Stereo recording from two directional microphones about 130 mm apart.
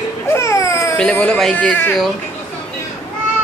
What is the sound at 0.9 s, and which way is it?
Speech, 10° left (ahead or behind).